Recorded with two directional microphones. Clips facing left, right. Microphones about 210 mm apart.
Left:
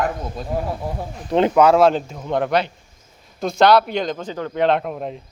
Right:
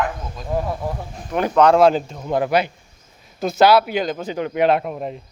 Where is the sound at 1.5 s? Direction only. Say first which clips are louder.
Right 2 dB; 5° left (ahead or behind).